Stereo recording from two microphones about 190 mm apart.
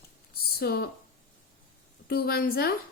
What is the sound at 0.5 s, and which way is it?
Speech, 55° left (ahead or behind).